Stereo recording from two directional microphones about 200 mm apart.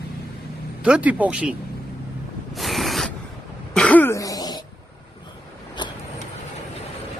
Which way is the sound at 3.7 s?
5° left (ahead or behind).